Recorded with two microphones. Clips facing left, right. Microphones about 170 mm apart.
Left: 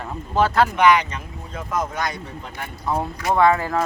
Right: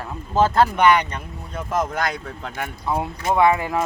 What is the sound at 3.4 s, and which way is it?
Speech, 15° right (ahead or behind).